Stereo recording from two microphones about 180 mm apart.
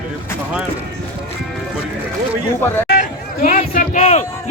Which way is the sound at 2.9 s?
50° left (ahead or behind).